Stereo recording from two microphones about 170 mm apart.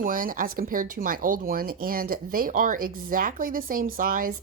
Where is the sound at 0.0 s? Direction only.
55° right (ahead or behind).